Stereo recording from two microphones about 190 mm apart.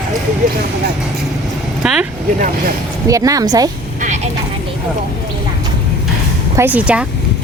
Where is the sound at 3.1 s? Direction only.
20° right (ahead or behind).